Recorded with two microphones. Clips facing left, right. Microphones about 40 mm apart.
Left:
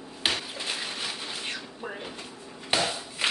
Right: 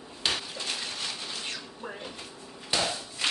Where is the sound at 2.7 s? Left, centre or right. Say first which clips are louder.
Left 2 dB; left.